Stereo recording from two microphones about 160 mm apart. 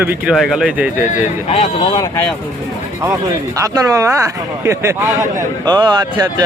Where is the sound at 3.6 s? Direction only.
20° right (ahead or behind).